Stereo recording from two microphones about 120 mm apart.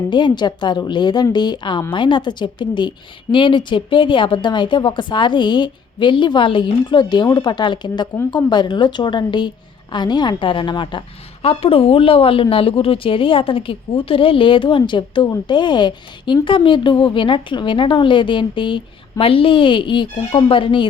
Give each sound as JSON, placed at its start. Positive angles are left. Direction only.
{"t": 0.1, "sound": "a woman's voice", "side_deg": 40}
{"t": 11.4, "sound": "speech", "side_deg": 55}